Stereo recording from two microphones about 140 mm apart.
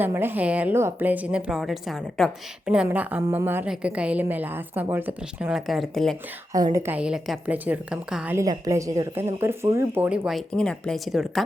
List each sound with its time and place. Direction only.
0.0 s a woman's voice: 15° right (ahead or behind); by 6.1 s centre (ahead or behind)
6.7 s a woman's voice: 15° right (ahead or behind)
8.4 s speech: 25° right (ahead or behind)
10.2 s speech: 5° left (ahead or behind)